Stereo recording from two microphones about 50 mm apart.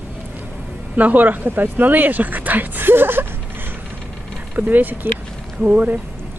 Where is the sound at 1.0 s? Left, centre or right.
Right.